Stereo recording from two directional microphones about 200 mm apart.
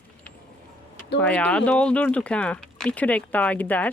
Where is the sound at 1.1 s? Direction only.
5° left (ahead or behind).